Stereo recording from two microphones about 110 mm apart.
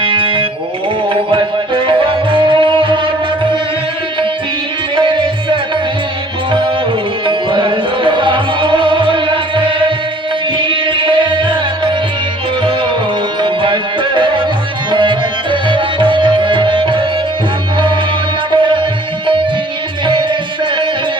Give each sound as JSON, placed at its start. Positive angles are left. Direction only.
{"t": 0.0, "sound": "music", "side_deg": -50}
{"t": 4.9, "sound": "music", "side_deg": -45}
{"t": 13.4, "sound": "music", "side_deg": -50}
{"t": 18.5, "sound": "music", "side_deg": -50}